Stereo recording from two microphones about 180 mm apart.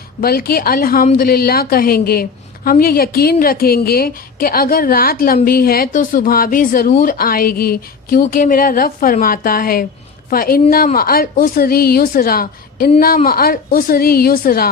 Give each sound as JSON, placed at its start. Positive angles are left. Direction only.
{"t": 0.2, "sound": "a woman's voice", "side_deg": 55}